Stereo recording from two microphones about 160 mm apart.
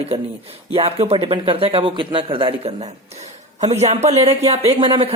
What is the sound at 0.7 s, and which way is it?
Speech, 40° right (ahead or behind).